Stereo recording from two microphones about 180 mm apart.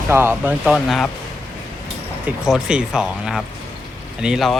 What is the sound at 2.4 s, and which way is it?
Speech, 5° right (ahead or behind).